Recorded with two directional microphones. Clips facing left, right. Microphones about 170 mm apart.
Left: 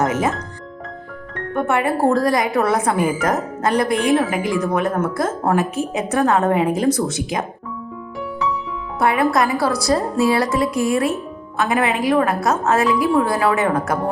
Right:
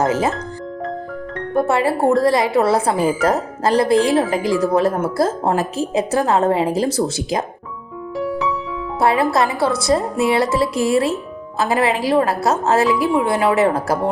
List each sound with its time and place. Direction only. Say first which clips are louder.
0.0 s music: right 1 dB; 30° right (ahead or behind)
1.5 s a woman's voice: right 2 dB; 30° right (ahead or behind)
9.0 s speech: right 1 dB; 30° right (ahead or behind)